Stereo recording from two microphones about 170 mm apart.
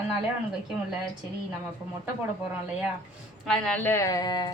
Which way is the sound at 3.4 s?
5° left (ahead or behind).